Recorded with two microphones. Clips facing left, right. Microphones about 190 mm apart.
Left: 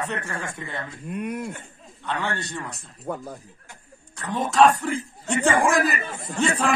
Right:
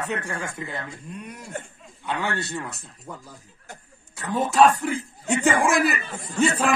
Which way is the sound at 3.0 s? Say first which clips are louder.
Left 9 dB; 60° left (ahead or behind).